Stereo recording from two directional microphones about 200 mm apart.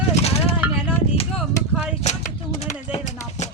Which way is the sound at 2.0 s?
35° left (ahead or behind).